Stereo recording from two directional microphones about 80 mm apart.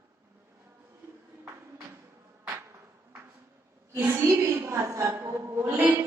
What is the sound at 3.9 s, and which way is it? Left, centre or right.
A woman's voice, right.